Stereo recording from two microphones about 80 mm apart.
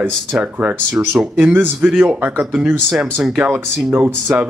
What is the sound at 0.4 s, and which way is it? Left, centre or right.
Speech, centre.